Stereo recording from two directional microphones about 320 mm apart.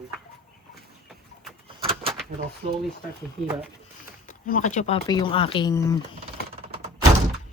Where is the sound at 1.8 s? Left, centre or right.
Centre.